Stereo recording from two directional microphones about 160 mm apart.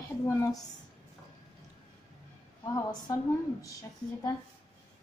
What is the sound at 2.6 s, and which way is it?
A woman's voice, 25° left (ahead or behind).